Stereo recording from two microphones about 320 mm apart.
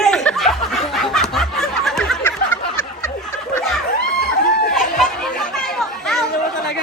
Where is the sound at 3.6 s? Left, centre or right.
Centre.